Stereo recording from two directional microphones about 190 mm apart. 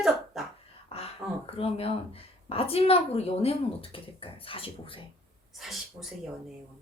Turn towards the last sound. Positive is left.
turn(degrees=0)  # may be behind; listen again after turning